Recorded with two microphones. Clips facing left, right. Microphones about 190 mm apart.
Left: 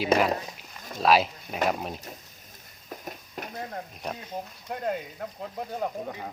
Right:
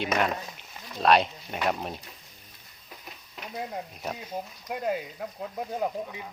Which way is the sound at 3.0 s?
50° left (ahead or behind).